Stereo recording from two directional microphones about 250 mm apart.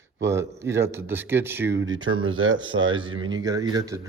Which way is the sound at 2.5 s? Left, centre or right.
Centre.